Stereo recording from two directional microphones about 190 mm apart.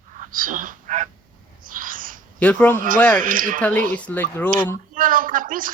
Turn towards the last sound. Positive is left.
turn(degrees=-45)  # may be behind; listen again after turning